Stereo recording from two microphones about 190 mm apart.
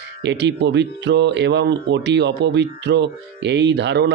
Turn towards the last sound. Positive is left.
turn(degrees=-65)  # may be behind; listen again after turning